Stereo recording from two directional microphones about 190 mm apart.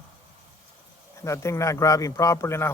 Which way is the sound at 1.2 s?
15° left (ahead or behind).